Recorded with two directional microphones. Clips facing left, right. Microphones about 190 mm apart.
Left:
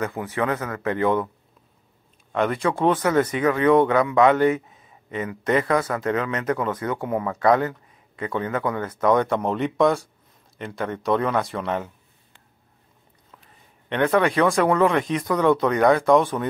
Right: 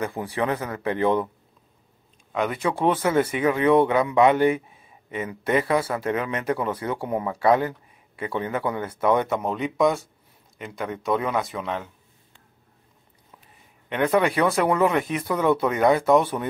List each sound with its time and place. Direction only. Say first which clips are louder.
0.0 s a man's voice: left 1 dB; 30° right (ahead or behind)
0.4 s a man's voice: left 1 dB; 20° right (ahead or behind)
2.3 s speech: left 2 dB; centre (ahead or behind)
3.4 s a man's voice: left 1 dB; 25° right (ahead or behind)
4.6 s a sound: left 2 dB; 10° right (ahead or behind)
5.5 s a man's voice: left 1 dB; 20° right (ahead or behind)
5.8 s a man's voice: left 1 dB; 10° right (ahead or behind)
8.2 s a man's voice: left 1 dB; 10° right (ahead or behind)
8.9 s speech: left 2 dB; 10° right (ahead or behind)
13.8 s speech: left 1 dB; 5° right (ahead or behind)